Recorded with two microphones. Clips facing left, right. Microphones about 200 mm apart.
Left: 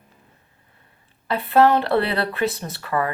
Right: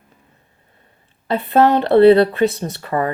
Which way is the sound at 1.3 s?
20° right (ahead or behind).